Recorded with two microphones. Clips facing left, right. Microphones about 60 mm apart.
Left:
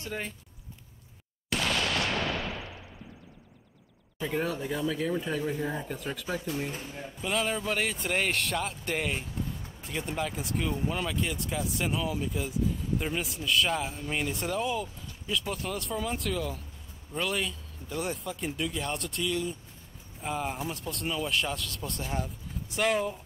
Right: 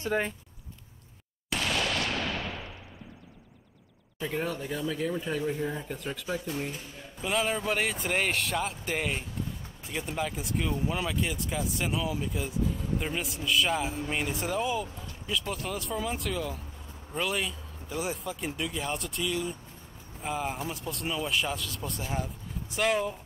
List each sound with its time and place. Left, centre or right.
0.0 s speech: right
4.2 s speech: centre